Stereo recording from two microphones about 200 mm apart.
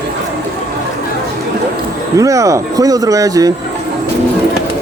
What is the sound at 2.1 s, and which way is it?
Speech, 15° right (ahead or behind).